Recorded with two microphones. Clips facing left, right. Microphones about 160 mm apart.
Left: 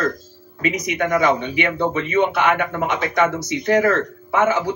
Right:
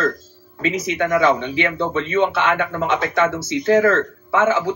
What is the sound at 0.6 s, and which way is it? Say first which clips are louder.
Speech: right 1 dB; 15° left (ahead or behind).